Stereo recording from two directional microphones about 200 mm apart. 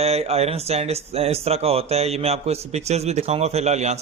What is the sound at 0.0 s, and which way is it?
A man's voice, 30° right (ahead or behind).